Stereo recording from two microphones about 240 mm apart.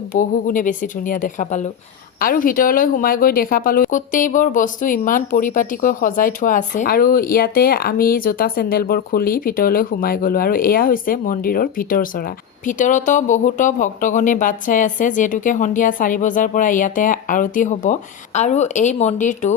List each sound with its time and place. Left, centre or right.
0.1 s speech: left